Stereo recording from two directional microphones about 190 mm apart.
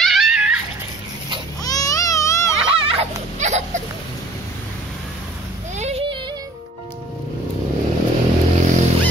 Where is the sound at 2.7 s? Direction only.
30° right (ahead or behind).